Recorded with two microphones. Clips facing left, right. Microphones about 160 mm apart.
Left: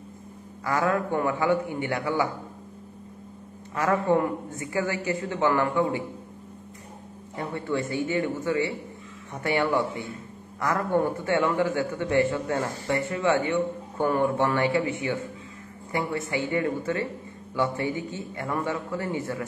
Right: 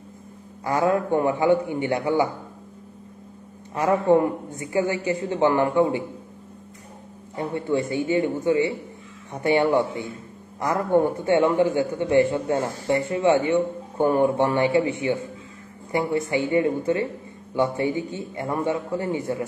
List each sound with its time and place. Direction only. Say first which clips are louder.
0.7 s a man's voice: right 4 dB; 25° right (ahead or behind)
3.7 s a man's voice: right 4 dB; 20° right (ahead or behind)
7.3 s a man's voice: right 4 dB; 20° right (ahead or behind)